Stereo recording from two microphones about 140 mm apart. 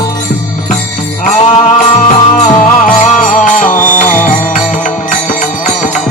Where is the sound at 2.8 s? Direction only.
70° left (ahead or behind).